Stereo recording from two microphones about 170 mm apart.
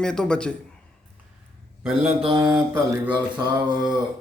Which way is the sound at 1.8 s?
5° right (ahead or behind).